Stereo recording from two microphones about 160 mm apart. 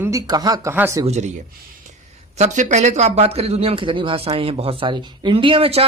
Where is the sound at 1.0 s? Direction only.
45° right (ahead or behind).